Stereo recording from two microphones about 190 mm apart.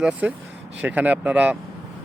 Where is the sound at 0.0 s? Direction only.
5° right (ahead or behind).